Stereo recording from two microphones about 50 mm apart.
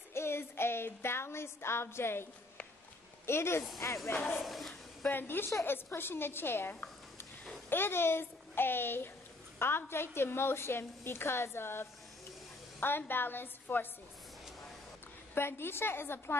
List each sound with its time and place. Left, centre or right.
0.1 s child singing: left
3.3 s speech: left
3.8 s speech: left
4.4 s speech: centre
5.1 s a woman's voice: left
15.3 s a woman's voice: left